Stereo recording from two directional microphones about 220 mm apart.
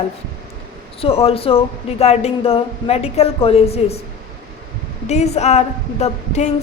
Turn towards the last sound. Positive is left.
turn(degrees=30)  # may be behind; listen again after turning